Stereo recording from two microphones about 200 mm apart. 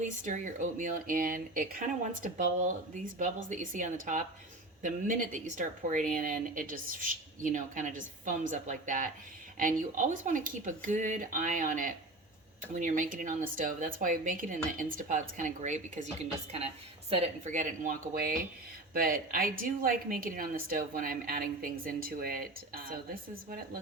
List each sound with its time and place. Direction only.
0.0 s a woman's voice: 40° right (ahead or behind)